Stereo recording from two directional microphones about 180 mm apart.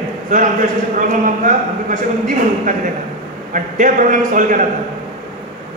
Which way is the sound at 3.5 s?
45° right (ahead or behind).